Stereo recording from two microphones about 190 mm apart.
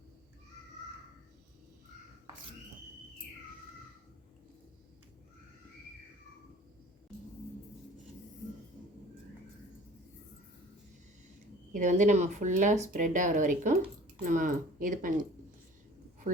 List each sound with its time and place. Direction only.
11.7 s speech: 40° right (ahead or behind)